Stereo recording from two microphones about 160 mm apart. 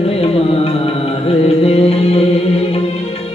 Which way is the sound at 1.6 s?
40° left (ahead or behind).